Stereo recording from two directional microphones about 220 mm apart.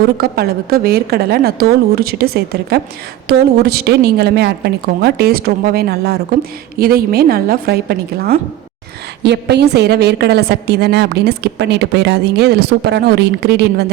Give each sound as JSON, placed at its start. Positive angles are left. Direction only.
{"t": 0.2, "sound": "a woman's voice", "side_deg": -45}